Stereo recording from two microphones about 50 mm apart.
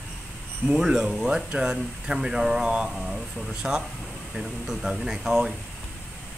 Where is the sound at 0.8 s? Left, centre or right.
Centre.